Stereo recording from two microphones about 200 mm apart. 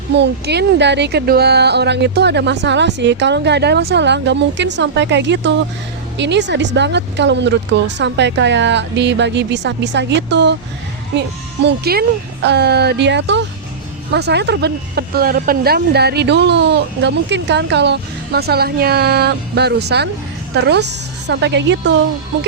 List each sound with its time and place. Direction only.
0.1 s speech: 55° right (ahead or behind)